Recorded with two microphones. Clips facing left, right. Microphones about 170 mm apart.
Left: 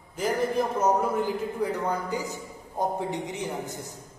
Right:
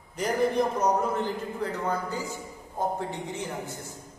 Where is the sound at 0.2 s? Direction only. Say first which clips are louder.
Right 1 dB; centre (ahead or behind).